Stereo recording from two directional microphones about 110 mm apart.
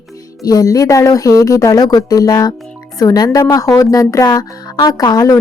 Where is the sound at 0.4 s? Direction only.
35° left (ahead or behind).